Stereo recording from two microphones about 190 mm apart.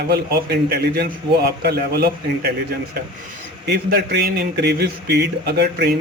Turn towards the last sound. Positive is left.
turn(degrees=-55)  # may be behind; listen again after turning